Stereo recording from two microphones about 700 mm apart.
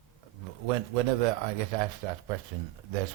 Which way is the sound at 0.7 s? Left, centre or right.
Right.